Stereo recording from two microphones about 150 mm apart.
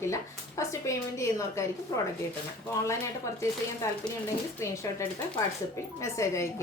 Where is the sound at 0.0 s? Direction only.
20° left (ahead or behind).